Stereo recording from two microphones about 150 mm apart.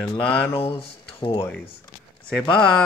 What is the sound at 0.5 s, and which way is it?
Speech, 40° left (ahead or behind).